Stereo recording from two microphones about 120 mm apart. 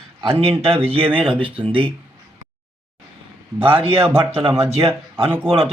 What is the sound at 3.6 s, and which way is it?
Speech, 50° right (ahead or behind).